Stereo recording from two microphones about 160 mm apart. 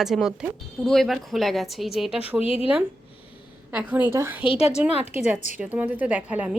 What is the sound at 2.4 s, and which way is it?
Speech, 35° left (ahead or behind).